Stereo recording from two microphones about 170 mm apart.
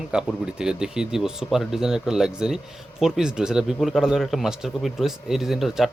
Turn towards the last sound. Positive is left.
turn(degrees=0)  # may be behind; listen again after turning